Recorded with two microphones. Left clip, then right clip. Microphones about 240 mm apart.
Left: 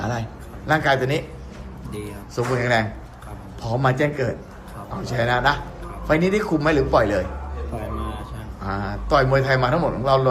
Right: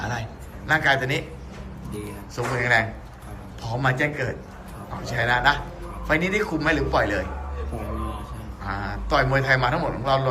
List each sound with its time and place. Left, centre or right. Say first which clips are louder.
0.0 s a sound: left 2 dB; left
0.7 s a man's voice: left 1 dB; left
2.3 s a man's voice: left 1 dB; centre
8.6 s a man's voice: left 2 dB; centre